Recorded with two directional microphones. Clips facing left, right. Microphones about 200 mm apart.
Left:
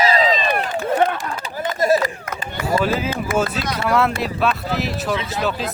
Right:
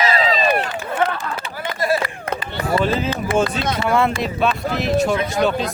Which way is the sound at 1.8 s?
45° left (ahead or behind).